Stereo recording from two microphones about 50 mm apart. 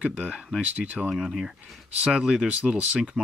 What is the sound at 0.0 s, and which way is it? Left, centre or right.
Speech, right.